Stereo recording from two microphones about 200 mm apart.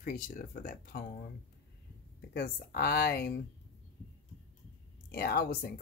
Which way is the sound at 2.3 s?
50° left (ahead or behind).